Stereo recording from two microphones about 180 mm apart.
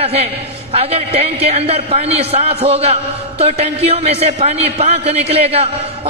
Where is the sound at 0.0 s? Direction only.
35° right (ahead or behind).